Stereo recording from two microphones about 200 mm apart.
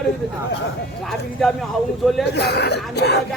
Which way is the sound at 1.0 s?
Centre (ahead or behind).